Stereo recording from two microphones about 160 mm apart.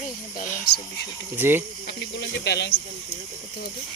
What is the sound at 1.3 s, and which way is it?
Cricket, 15° right (ahead or behind).